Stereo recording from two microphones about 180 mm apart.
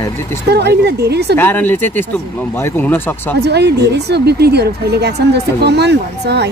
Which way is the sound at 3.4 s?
65° right (ahead or behind).